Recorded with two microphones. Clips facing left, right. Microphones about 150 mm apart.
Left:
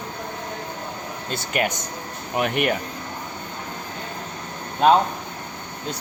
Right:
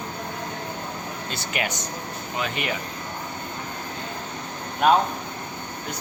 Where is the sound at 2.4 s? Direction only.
60° left (ahead or behind).